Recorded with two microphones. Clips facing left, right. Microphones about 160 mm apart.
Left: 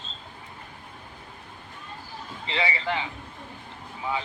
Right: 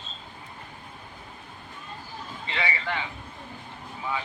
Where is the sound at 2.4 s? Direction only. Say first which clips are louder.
Left 3 dB; 25° left (ahead or behind).